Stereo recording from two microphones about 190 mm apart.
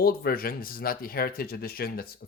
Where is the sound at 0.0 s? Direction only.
55° left (ahead or behind).